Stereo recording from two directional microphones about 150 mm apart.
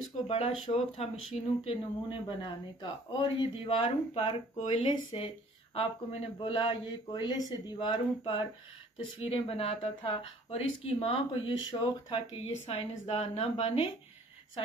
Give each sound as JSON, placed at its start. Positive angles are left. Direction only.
{"t": 0.3, "sound": "speech", "side_deg": 45}
{"t": 5.8, "sound": "speech", "side_deg": 40}
{"t": 7.6, "sound": "a sound", "side_deg": 25}
{"t": 9.2, "sound": "speech", "side_deg": 40}